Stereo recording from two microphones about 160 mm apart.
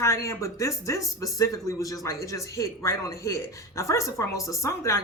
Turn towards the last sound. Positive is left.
turn(degrees=20)  # may be behind; listen again after turning